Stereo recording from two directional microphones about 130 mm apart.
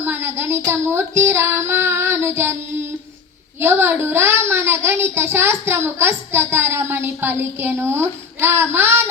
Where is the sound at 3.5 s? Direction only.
20° right (ahead or behind).